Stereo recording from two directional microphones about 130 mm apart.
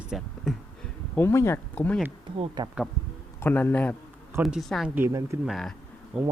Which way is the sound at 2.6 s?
30° right (ahead or behind).